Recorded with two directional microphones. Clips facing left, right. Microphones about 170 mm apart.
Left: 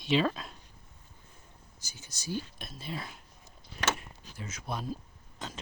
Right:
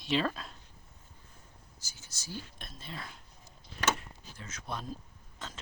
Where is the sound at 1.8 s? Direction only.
15° left (ahead or behind).